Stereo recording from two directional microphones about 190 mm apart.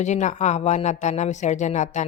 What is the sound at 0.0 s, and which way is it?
A woman's voice, 40° left (ahead or behind).